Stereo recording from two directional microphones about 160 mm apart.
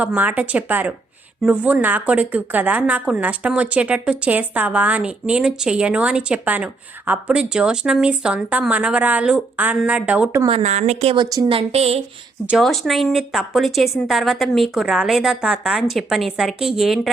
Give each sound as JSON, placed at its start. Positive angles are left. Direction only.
{"t": 0.0, "sound": "a woman's voice", "side_deg": -10}
{"t": 10.6, "sound": "a woman's voice", "side_deg": -45}
{"t": 12.5, "sound": "a woman's voice", "side_deg": 0}